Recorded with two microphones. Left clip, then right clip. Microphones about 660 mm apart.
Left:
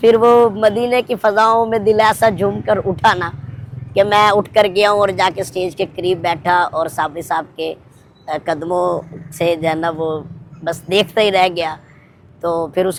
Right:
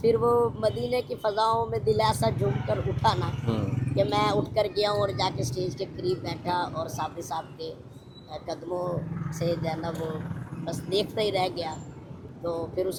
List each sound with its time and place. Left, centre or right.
0.0 s speech: left